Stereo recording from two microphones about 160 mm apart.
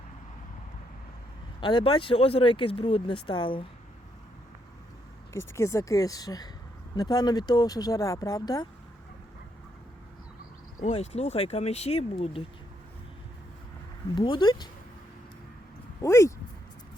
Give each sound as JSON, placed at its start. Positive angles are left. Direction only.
{"t": 1.6, "sound": "speech", "side_deg": 30}
{"t": 5.3, "sound": "speech", "side_deg": 15}
{"t": 10.8, "sound": "speech", "side_deg": 45}
{"t": 14.2, "sound": "speech", "side_deg": 25}
{"t": 16.0, "sound": "speech", "side_deg": 20}